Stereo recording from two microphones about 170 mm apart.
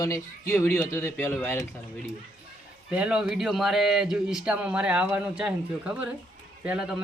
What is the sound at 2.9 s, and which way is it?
A man's voice, 5° right (ahead or behind).